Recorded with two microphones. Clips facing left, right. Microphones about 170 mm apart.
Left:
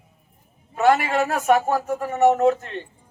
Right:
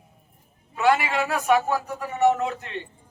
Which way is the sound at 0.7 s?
45° left (ahead or behind).